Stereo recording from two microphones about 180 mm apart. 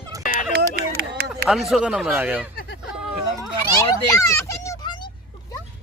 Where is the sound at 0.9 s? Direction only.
60° right (ahead or behind).